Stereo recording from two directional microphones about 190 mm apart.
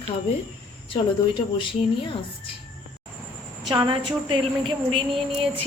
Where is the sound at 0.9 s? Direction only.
25° left (ahead or behind).